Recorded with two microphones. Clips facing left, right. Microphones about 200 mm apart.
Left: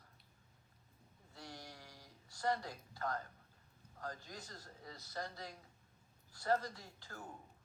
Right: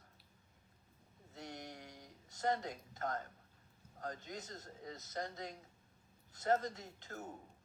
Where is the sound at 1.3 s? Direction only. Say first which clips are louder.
Right 4 dB; 20° right (ahead or behind).